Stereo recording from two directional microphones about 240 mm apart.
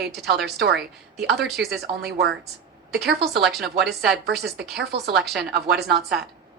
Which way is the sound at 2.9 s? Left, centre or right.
Right.